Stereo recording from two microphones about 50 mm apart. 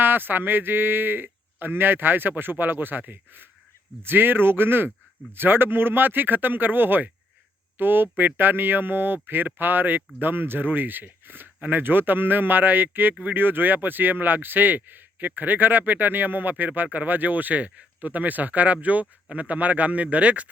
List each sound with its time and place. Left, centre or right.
0.0 s speech: right